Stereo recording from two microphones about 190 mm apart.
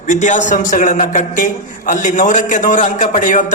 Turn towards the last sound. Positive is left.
turn(degrees=45)  # may be behind; listen again after turning